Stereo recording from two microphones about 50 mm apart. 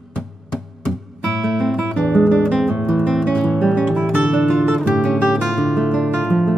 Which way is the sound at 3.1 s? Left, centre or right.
Centre.